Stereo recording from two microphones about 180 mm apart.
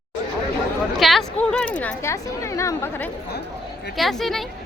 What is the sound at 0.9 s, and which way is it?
Speech, centre (ahead or behind).